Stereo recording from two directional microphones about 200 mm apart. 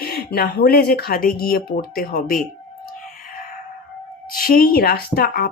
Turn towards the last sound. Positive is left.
turn(degrees=50)  # may be behind; listen again after turning